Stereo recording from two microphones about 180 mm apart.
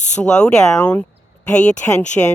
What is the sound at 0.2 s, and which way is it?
Speech, 5° left (ahead or behind).